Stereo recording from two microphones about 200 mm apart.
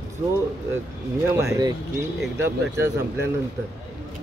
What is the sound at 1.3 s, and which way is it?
Speech, 15° right (ahead or behind).